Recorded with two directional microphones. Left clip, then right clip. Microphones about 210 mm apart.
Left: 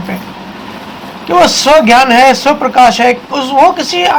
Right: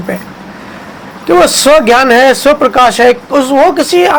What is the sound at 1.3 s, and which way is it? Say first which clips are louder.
Speech: right 1 dB; 55° right (ahead or behind).